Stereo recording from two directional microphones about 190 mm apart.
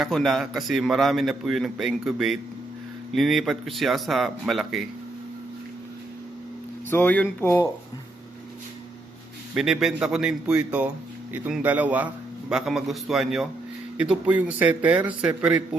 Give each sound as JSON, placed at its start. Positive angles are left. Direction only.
{"t": 0.0, "sound": "a man's voice", "side_deg": 0}
{"t": 6.9, "sound": "speech", "side_deg": 10}
{"t": 9.6, "sound": "a man's voice", "side_deg": 0}